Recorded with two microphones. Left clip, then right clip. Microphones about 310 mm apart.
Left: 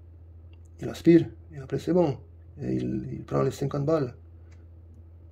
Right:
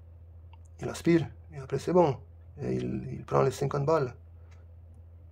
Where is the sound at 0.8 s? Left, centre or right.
Centre.